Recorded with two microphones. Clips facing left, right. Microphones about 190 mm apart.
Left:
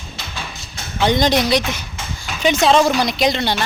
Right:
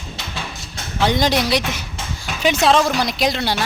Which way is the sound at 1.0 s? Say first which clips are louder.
Left 2 dB; 5° right (ahead or behind).